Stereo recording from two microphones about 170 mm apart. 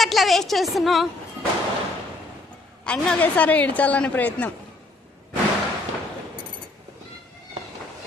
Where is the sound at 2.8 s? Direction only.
5° left (ahead or behind).